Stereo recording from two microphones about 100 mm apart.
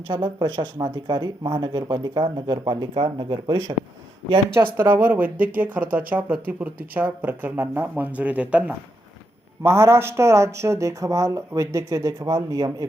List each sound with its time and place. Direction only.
0.1 s speech: 50° right (ahead or behind)
4.5 s speech: 20° right (ahead or behind)
9.6 s speech: 25° right (ahead or behind)